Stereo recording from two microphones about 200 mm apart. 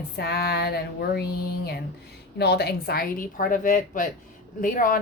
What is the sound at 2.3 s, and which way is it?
A woman's voice, 55° left (ahead or behind).